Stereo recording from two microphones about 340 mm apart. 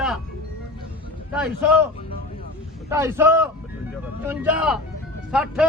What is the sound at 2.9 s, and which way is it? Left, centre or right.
A man's voice, centre.